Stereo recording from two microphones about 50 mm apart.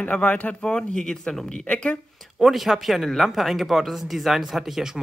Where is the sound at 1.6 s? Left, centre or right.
Left.